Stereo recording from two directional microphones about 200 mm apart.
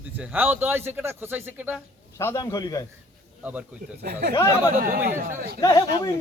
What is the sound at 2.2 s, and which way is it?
Speech, 15° left (ahead or behind).